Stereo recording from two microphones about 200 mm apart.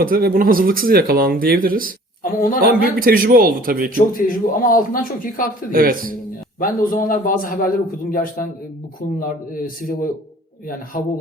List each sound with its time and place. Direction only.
0.0 s speech: 45° right (ahead or behind)
2.2 s a man's voice: 45° left (ahead or behind)
3.0 s speech: 45° right (ahead or behind)
3.9 s a man's voice: 45° left (ahead or behind)
5.7 s speech: 45° right (ahead or behind)
6.6 s a man's voice: 45° left (ahead or behind)